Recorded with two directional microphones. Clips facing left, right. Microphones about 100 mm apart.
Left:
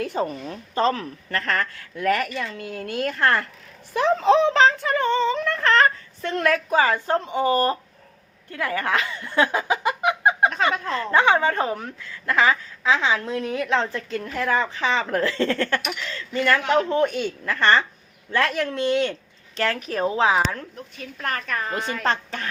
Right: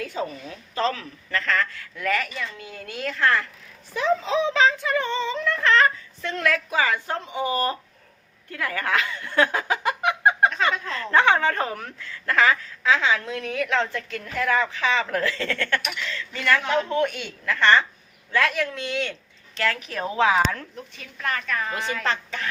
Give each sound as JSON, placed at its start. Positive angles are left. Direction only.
{"t": 0.0, "sound": "speech", "side_deg": 50}
{"t": 2.1, "sound": "speech", "side_deg": 55}
{"t": 8.4, "sound": "a woman's voice", "side_deg": 25}